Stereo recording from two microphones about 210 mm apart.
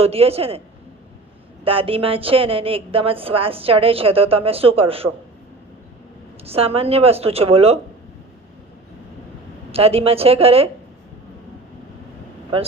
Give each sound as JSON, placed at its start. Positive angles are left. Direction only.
{"t": 0.0, "sound": "a woman's voice", "side_deg": -30}
{"t": 1.6, "sound": "a woman's voice", "side_deg": -25}
{"t": 6.4, "sound": "a woman's voice", "side_deg": -30}
{"t": 9.7, "sound": "a woman's voice", "side_deg": -30}